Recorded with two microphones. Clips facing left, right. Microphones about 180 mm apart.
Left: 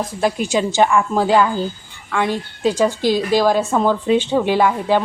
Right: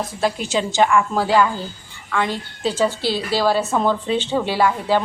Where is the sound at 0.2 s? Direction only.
15° left (ahead or behind).